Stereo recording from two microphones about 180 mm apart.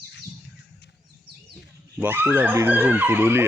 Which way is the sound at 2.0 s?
10° right (ahead or behind).